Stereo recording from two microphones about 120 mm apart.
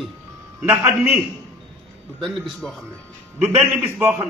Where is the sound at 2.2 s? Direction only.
Centre (ahead or behind).